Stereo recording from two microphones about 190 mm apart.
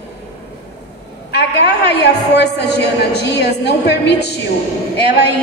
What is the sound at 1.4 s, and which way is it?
A woman's voice, 60° left (ahead or behind).